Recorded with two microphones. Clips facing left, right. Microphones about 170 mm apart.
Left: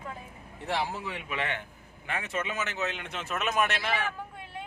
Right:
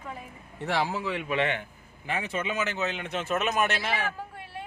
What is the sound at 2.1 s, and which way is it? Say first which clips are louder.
Speech: right 3 dB; centre (ahead or behind).